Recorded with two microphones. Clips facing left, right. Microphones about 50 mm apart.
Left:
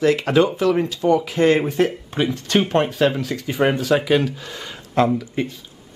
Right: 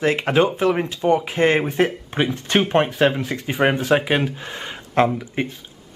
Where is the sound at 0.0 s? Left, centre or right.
Right.